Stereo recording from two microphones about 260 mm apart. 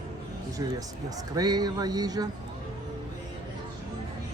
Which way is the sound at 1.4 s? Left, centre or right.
Centre.